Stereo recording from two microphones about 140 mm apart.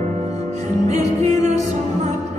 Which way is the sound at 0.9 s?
55° right (ahead or behind).